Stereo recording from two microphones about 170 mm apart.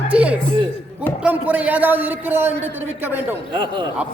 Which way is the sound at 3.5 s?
30° right (ahead or behind).